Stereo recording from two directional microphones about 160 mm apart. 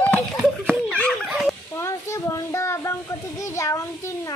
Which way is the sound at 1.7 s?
15° left (ahead or behind).